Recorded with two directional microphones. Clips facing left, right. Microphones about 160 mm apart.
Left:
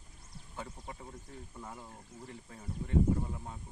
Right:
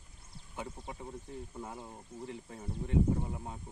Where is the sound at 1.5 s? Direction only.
25° right (ahead or behind).